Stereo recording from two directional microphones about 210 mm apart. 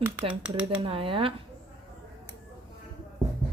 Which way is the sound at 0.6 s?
25° right (ahead or behind).